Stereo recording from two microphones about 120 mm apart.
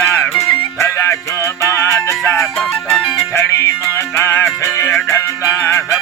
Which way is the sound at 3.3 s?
25° left (ahead or behind).